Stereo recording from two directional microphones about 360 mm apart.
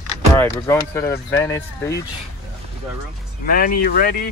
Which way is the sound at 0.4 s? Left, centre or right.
Centre.